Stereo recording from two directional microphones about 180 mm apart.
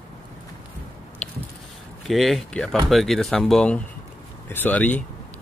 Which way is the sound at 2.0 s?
Centre (ahead or behind).